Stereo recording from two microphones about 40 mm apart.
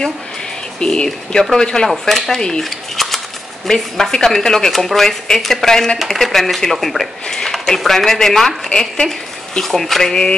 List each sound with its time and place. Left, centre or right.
0.7 s speech: left
1.9 s speech: centre
2.6 s a sound: centre
3.6 s speech: centre
9.6 s speech: centre